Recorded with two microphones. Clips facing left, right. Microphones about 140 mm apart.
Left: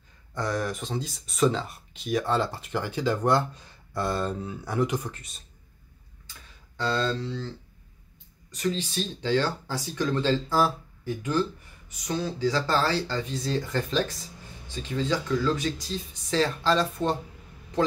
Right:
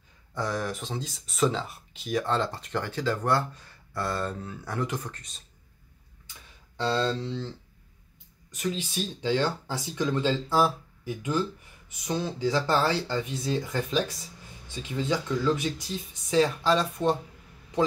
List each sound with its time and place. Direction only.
0.3 s speech: centre (ahead or behind)
6.8 s speech: 25° right (ahead or behind)
8.5 s speech: 10° right (ahead or behind)
11.9 s speech: 20° right (ahead or behind)
13.6 s speech: 5° right (ahead or behind)
14.8 s speech: 15° right (ahead or behind)